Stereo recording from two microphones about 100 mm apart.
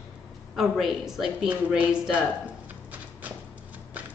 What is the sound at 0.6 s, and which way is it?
A woman's voice, centre (ahead or behind).